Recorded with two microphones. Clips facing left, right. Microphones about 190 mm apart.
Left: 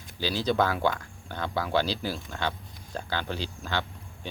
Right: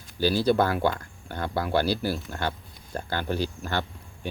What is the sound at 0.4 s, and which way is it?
Speech, 10° right (ahead or behind).